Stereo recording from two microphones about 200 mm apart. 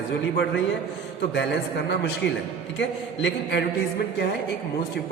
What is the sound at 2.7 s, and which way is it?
Speech, 65° left (ahead or behind).